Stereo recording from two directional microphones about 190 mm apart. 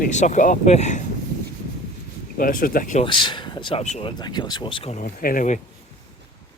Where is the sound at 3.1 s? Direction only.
25° left (ahead or behind).